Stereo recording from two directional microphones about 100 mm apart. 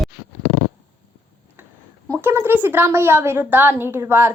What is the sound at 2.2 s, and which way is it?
A woman's voice, 20° right (ahead or behind).